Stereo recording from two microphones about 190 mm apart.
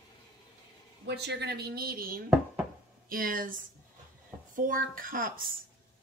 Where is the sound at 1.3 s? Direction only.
60° right (ahead or behind).